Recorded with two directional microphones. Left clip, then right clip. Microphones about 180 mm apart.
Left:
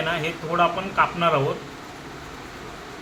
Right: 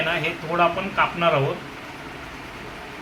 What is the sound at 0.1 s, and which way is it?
Speech, 5° left (ahead or behind).